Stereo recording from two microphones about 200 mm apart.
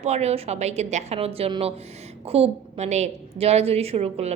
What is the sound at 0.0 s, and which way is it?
A woman's voice, 35° right (ahead or behind).